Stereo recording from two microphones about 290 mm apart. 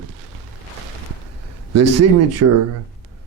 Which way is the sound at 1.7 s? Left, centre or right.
Right.